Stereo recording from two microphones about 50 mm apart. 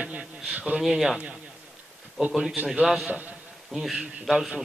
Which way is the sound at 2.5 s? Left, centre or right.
Right.